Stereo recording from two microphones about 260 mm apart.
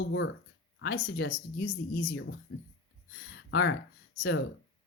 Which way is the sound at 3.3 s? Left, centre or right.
Left.